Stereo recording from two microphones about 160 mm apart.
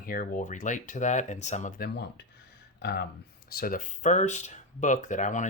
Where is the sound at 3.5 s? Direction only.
65° left (ahead or behind).